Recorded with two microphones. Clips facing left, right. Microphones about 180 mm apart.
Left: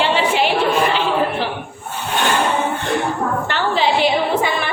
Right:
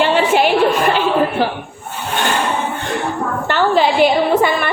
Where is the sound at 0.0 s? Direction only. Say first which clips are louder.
Right 3 dB; 50° right (ahead or behind).